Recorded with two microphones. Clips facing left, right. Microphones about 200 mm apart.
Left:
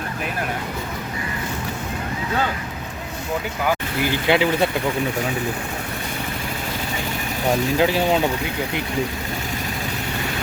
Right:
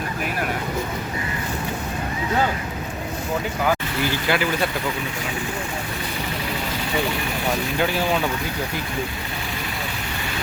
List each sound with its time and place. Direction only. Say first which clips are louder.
4.3 s speech: left 5 dB; 20° left (ahead or behind)
7.8 s speech: left 2 dB; 25° left (ahead or behind)